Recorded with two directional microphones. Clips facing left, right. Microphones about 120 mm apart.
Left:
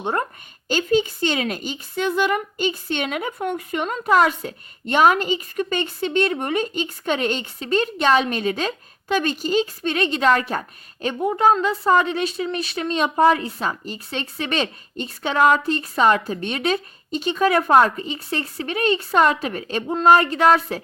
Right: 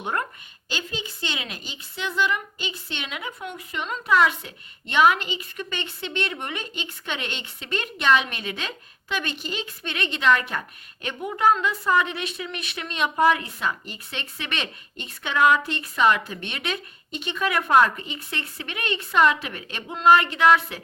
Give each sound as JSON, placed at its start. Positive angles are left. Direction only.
{"t": 0.0, "sound": "a woman's voice", "side_deg": 30}
{"t": 0.7, "sound": "a woman's voice", "side_deg": 45}